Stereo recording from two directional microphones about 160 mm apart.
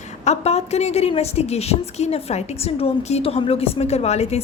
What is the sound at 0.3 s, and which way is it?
A woman's voice, 40° left (ahead or behind).